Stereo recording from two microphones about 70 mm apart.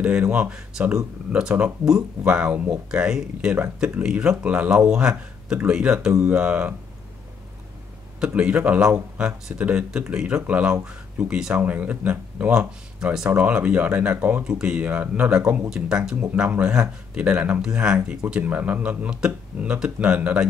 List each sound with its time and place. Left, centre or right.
0.0 s speech: centre
8.3 s speech: centre
14.4 s speech: centre